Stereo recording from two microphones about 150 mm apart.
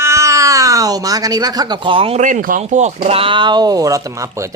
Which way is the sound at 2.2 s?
60° right (ahead or behind).